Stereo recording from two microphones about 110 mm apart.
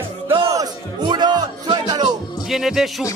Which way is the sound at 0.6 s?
40° right (ahead or behind).